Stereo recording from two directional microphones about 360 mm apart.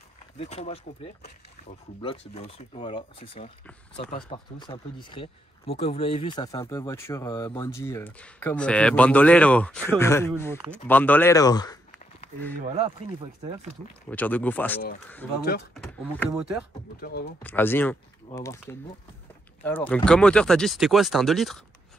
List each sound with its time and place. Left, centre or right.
0.4 s speech: centre
12.5 s speech: centre
14.0 s speech: centre
17.0 s speech: left
17.4 s speech: centre